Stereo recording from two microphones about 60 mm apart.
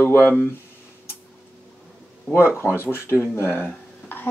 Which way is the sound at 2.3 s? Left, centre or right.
Left.